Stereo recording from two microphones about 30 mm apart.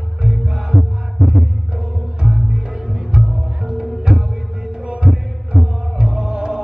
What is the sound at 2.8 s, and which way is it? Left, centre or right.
Music, right.